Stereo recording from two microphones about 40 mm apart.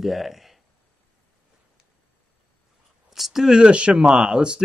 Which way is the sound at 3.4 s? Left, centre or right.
Right.